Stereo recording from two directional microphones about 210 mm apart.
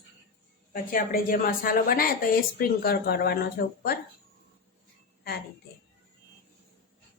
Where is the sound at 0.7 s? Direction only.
40° left (ahead or behind).